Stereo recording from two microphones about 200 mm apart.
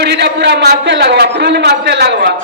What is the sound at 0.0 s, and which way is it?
A man's voice, 55° right (ahead or behind).